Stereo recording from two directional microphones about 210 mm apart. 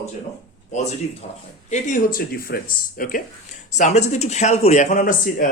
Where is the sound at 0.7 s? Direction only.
30° left (ahead or behind).